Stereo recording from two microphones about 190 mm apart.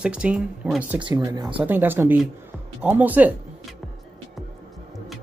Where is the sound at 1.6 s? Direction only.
10° right (ahead or behind).